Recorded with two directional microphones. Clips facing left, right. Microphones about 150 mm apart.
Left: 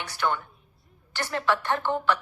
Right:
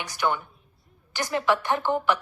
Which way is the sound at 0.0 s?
15° right (ahead or behind).